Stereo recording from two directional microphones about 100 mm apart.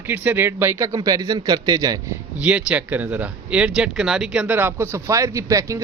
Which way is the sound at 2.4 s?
15° right (ahead or behind).